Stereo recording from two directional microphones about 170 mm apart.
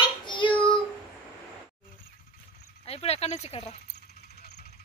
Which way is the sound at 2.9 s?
35° left (ahead or behind).